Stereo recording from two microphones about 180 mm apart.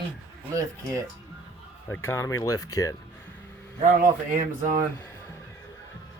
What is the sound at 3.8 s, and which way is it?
Speech, 45° right (ahead or behind).